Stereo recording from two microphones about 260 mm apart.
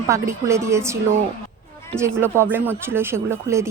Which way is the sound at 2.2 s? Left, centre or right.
Centre.